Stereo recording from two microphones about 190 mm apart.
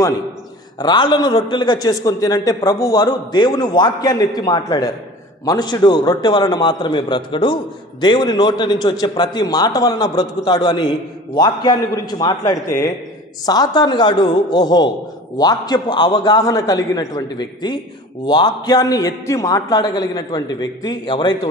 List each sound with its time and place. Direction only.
0.7 s a man's voice: 20° left (ahead or behind)